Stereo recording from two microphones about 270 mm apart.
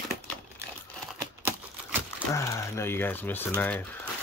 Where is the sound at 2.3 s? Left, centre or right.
Centre.